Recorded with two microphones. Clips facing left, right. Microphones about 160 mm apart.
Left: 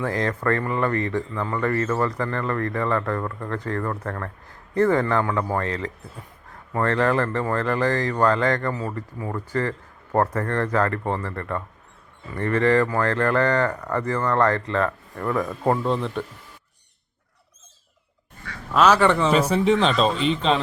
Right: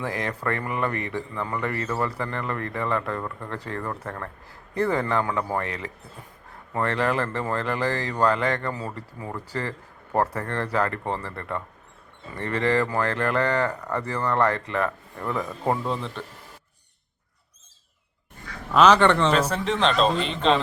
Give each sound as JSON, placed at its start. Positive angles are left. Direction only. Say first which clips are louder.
{"t": 0.0, "sound": "speech", "louder": "left 4 dB", "side_deg": -15}
{"t": 15.7, "sound": "a man's voice", "louder": "left 4 dB", "side_deg": 0}
{"t": 18.7, "sound": "a man's voice", "louder": "even", "side_deg": 0}